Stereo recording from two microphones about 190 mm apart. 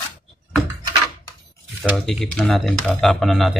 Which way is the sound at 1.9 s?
Centre (ahead or behind).